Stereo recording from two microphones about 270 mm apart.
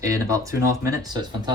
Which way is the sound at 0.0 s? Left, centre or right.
Centre.